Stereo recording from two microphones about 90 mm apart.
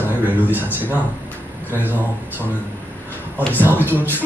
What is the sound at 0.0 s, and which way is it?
Speech, 20° right (ahead or behind).